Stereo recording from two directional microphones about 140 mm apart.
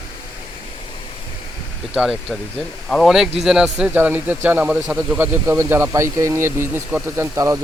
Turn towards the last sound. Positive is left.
turn(degrees=-20)  # may be behind; listen again after turning